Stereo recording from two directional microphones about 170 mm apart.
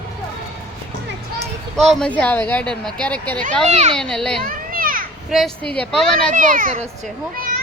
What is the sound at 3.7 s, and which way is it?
Speech, 45° right (ahead or behind).